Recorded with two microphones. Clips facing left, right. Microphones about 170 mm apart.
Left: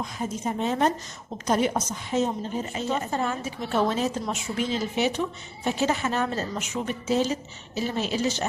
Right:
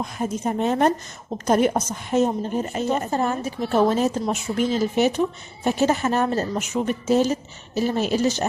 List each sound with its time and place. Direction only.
0.0 s a woman's voice: 55° right (ahead or behind)